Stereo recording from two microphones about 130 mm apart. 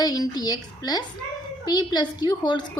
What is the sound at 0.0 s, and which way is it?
Speech, 30° left (ahead or behind).